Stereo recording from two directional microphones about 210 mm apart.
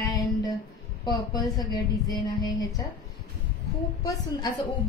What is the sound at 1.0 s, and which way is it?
A woman's voice, 20° left (ahead or behind).